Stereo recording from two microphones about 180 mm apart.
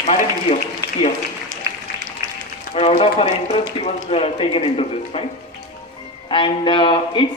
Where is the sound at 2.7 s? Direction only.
35° left (ahead or behind).